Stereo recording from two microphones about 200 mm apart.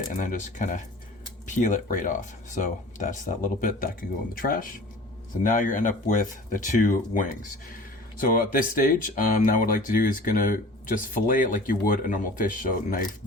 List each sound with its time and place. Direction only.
0.1 s speech: 40° left (ahead or behind)